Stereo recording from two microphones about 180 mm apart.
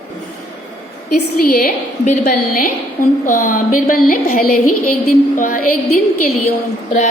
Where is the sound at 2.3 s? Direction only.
50° left (ahead or behind).